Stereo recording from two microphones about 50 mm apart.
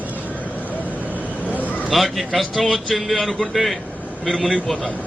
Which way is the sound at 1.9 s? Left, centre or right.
Centre.